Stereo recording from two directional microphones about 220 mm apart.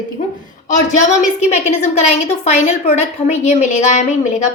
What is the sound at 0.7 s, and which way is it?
A woman's voice, 35° left (ahead or behind).